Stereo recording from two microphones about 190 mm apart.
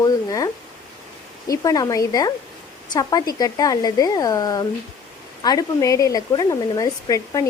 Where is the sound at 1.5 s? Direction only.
20° left (ahead or behind).